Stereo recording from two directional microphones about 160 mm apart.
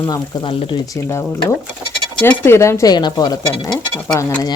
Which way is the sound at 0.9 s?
20° left (ahead or behind).